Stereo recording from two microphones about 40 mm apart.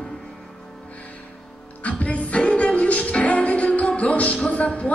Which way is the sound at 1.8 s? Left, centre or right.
Left.